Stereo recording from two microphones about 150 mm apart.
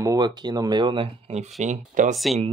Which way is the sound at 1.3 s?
50° right (ahead or behind).